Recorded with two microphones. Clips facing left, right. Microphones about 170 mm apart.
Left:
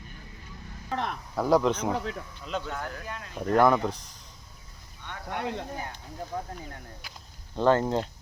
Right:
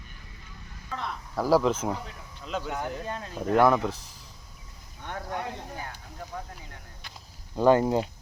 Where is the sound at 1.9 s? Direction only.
80° left.